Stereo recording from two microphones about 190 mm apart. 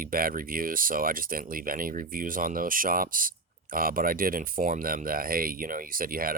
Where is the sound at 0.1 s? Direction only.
50° right (ahead or behind).